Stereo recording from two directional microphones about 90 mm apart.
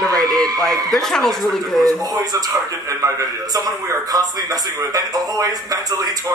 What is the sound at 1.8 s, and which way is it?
Speech, 45° right (ahead or behind).